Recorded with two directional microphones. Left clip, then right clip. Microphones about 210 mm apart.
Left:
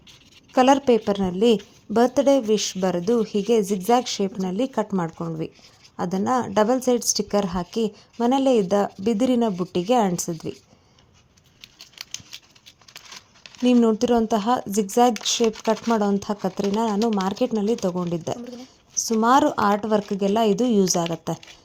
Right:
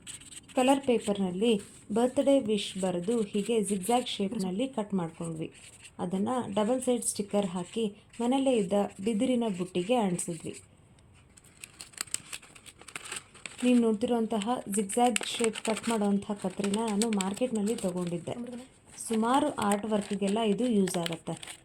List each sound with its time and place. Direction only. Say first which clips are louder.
0.5 s speech: left 9 dB; 40° left (ahead or behind)
13.7 s speech: left 8 dB; 40° left (ahead or behind)